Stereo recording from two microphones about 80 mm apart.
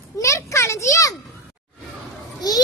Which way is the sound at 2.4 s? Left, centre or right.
Left.